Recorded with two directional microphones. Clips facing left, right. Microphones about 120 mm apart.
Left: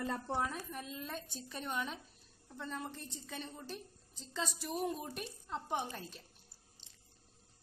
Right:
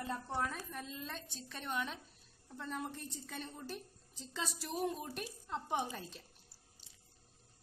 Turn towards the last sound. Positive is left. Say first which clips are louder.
# right 1 dB
turn(degrees=-5)  # may be behind; listen again after turning